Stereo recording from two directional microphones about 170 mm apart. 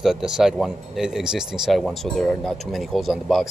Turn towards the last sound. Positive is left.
turn(degrees=0)  # may be behind; listen again after turning